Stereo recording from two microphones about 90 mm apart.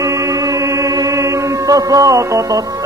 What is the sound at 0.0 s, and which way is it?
Music, 40° right (ahead or behind).